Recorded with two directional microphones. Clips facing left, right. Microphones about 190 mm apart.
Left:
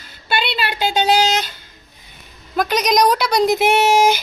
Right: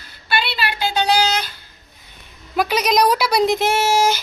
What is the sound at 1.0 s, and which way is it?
Speech, 25° left (ahead or behind).